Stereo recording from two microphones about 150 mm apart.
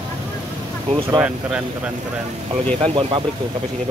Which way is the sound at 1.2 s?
5° right (ahead or behind).